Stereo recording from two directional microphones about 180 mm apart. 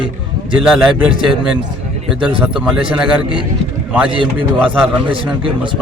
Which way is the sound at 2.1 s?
5° right (ahead or behind).